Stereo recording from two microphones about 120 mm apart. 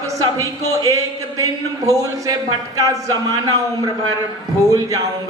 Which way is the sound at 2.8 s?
30° right (ahead or behind).